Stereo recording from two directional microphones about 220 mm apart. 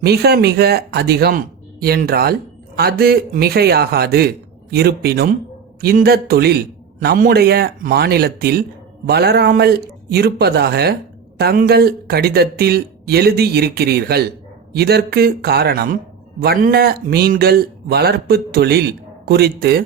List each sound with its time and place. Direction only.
0.0 s speech: 50° right (ahead or behind)